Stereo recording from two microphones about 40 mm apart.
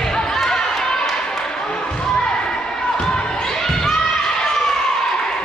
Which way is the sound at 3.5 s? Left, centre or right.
Centre.